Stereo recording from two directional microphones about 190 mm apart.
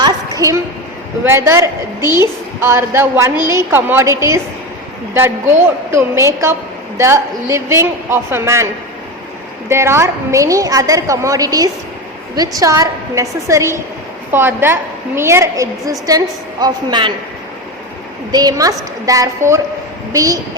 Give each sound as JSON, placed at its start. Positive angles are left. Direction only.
{"t": 0.0, "sound": "a sound", "side_deg": -20}
{"t": 1.2, "sound": "a woman's voice", "side_deg": -15}
{"t": 9.6, "sound": "a woman's voice", "side_deg": -15}
{"t": 18.3, "sound": "a woman's voice", "side_deg": -20}